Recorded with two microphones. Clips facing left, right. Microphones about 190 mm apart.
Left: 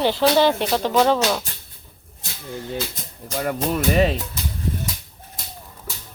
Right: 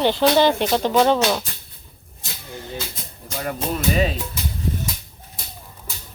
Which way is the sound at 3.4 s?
50° left (ahead or behind).